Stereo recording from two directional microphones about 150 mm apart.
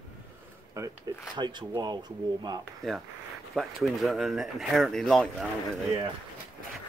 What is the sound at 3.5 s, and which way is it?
Speech, centre (ahead or behind).